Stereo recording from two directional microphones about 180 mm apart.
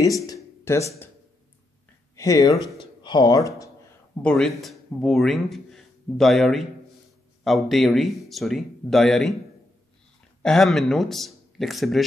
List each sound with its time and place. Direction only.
0.0 s a sound: 20° left (ahead or behind)
2.1 s speech: 20° left (ahead or behind)
4.2 s a man's voice: 5° left (ahead or behind)
10.4 s speech: 5° left (ahead or behind)